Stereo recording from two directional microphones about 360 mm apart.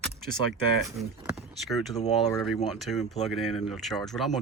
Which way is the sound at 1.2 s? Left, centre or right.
Centre.